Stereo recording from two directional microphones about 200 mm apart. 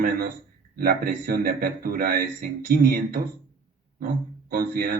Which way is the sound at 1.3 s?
45° right (ahead or behind).